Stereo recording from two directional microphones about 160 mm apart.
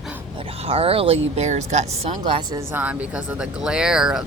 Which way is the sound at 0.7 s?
35° right (ahead or behind).